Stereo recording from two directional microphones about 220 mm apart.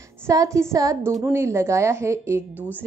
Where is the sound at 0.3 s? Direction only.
15° right (ahead or behind).